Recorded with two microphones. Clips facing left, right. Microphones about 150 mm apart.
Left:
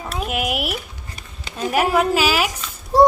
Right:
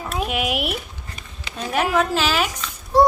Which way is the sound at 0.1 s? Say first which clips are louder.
Even; centre (ahead or behind).